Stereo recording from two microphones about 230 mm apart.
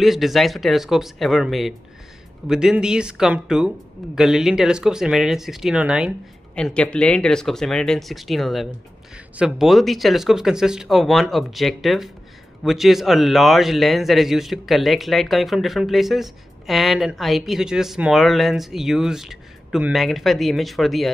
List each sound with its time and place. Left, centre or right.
0.0 s a man's voice: centre